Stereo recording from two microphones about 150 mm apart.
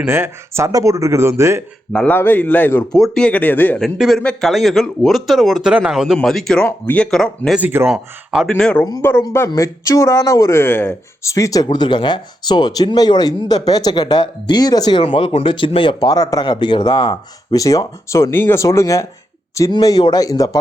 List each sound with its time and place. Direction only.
0.0 s speech: 15° right (ahead or behind)
1.9 s speech: 10° left (ahead or behind)
3.8 s speech: centre (ahead or behind)
7.6 s speech: 15° right (ahead or behind)
7.9 s speech: 5° right (ahead or behind)
9.0 s speech: 15° left (ahead or behind)